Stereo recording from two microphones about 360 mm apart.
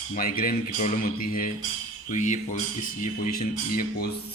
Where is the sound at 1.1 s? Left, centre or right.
Left.